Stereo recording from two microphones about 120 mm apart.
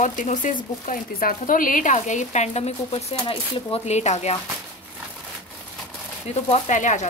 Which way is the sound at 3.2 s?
45° left (ahead or behind).